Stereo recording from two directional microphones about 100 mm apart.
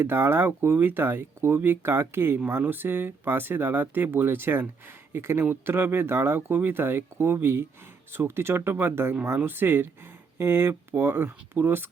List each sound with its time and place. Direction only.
0.0 s speech: 25° right (ahead or behind)